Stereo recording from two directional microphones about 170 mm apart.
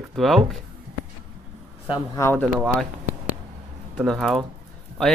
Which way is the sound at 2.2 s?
15° left (ahead or behind).